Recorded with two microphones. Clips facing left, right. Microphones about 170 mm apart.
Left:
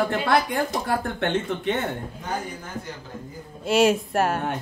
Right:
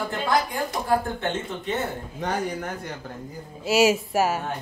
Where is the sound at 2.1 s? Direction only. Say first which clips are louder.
Right 4 dB; 70° right (ahead or behind).